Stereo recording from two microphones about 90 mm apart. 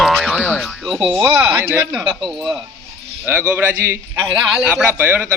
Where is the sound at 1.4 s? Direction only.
25° right (ahead or behind).